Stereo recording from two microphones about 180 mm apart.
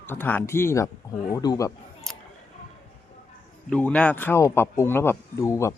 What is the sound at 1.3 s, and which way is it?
Speech, 20° left (ahead or behind).